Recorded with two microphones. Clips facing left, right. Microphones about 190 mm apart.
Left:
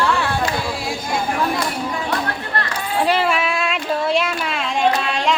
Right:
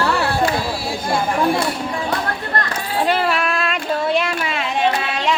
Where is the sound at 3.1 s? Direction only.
Centre (ahead or behind).